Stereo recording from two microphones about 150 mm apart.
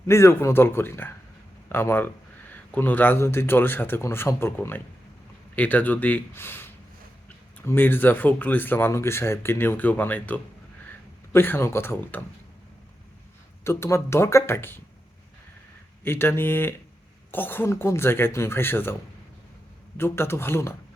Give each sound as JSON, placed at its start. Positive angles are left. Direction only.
{"t": 0.1, "sound": "speech", "side_deg": 15}
{"t": 13.7, "sound": "speech", "side_deg": 15}
{"t": 16.0, "sound": "speech", "side_deg": 15}
{"t": 20.0, "sound": "speech", "side_deg": 15}